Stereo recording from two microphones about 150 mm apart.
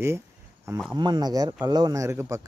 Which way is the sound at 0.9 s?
30° right (ahead or behind).